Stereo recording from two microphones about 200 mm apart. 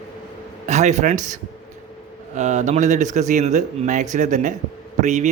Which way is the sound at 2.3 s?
35° right (ahead or behind).